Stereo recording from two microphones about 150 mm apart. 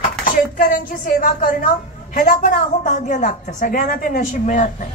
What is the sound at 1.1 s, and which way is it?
A woman's voice, 65° left (ahead or behind).